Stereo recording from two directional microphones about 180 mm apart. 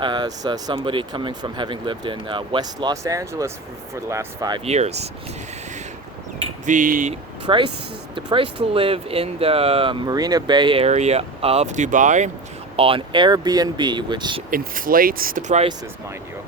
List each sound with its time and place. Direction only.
0.0 s speech: 25° right (ahead or behind)
4.6 s speech: 35° right (ahead or behind)
6.7 s speech: 45° right (ahead or behind)
7.1 s speech: 30° right (ahead or behind); by 12.3 s 45° right (ahead or behind)
12.7 s speech: 30° right (ahead or behind)
14.5 s speech: 50° right (ahead or behind)